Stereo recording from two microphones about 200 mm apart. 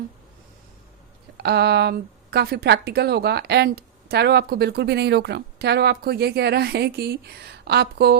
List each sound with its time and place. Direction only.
1.4 s a woman's voice: 55° right (ahead or behind)